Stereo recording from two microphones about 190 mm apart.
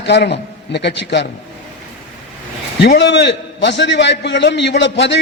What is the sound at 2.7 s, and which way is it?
A man's voice, 65° left (ahead or behind).